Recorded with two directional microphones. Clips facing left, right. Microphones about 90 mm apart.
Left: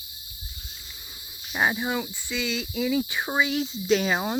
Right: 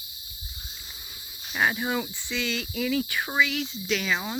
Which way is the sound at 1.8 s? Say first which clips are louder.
Even; 5° left (ahead or behind).